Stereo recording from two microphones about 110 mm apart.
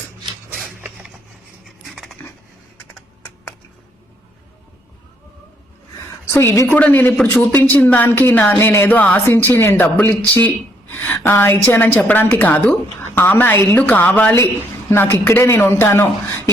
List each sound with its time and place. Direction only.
1.6 s dog: centre (ahead or behind)
6.3 s a woman's voice: 25° left (ahead or behind)